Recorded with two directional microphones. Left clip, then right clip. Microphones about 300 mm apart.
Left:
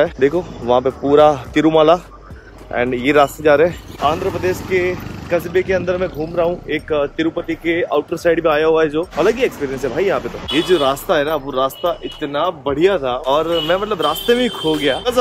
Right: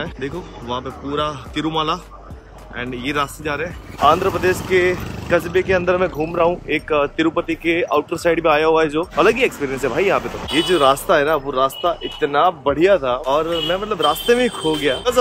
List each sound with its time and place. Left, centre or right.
0.0 s speech: centre
4.0 s speech: centre